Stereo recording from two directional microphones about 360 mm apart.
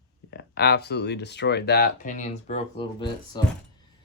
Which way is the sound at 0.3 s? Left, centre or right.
Left.